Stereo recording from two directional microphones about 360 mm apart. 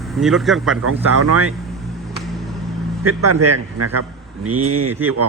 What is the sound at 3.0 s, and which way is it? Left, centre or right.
A man's voice, right.